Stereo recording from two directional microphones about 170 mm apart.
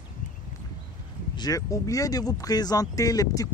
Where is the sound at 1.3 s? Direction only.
20° left (ahead or behind).